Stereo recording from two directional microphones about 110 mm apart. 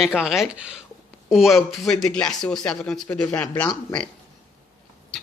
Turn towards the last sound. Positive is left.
turn(degrees=10)  # may be behind; listen again after turning